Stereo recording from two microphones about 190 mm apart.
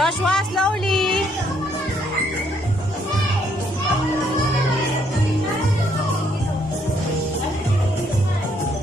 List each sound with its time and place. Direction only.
0.0 s music: centre (ahead or behind)